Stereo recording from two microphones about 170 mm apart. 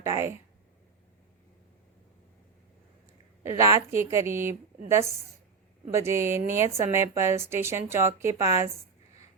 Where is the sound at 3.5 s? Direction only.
20° right (ahead or behind).